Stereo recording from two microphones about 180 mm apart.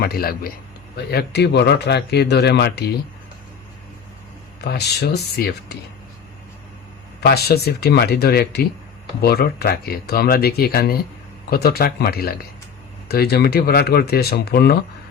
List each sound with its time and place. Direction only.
0.0 s speech: 55° left (ahead or behind)
0.9 s speech: 65° left (ahead or behind)
4.6 s speech: 65° left (ahead or behind)
7.2 s speech: 60° left (ahead or behind)